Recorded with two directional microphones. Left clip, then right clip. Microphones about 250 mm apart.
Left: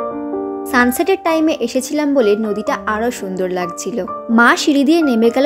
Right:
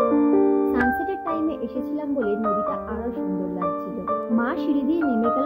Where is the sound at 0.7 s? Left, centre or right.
Left.